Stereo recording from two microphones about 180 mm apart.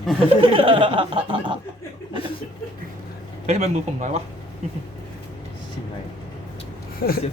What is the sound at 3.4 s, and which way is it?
Speech, 40° right (ahead or behind).